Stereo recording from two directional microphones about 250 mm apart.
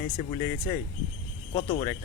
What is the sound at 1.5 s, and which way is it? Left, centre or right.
Speech, left.